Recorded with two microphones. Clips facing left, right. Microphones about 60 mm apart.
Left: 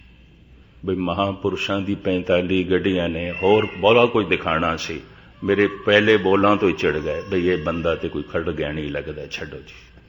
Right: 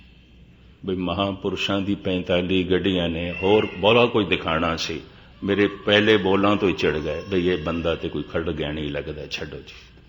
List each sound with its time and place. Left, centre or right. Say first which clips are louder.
0.9 s a man's voice: left 2 dB; centre
3.1 s a man's voice: left 1 dB; centre
3.3 s a man's voice: left 2 dB; left
8.1 s a man's voice: left 2 dB; centre; by 9.0 s left
9.0 s a man's voice: left 1 dB; centre